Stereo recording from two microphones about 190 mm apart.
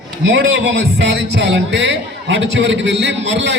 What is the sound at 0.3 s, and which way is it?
A man's voice, 70° right (ahead or behind).